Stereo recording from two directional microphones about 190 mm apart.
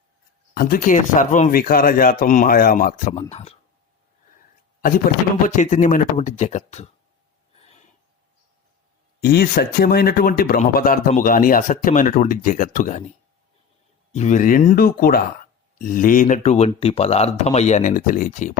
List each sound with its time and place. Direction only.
0.5 s speech: 50° left (ahead or behind)
5.5 s speech: 40° left (ahead or behind)
9.2 s speech: 55° left (ahead or behind)
14.1 s speech: 40° left (ahead or behind)